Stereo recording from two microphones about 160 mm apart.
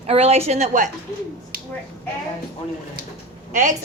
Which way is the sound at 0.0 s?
40° right (ahead or behind).